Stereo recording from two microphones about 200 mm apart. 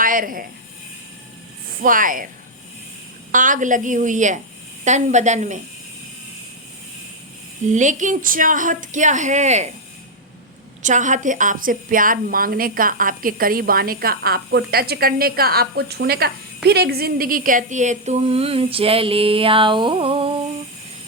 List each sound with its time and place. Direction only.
0.0 s a woman's voice: 45° right (ahead or behind)
1.8 s a woman's voice: 40° right (ahead or behind)
3.3 s a woman's voice: 40° right (ahead or behind)
7.7 s a woman's voice: 40° right (ahead or behind)
10.8 s a woman's voice: 40° right (ahead or behind)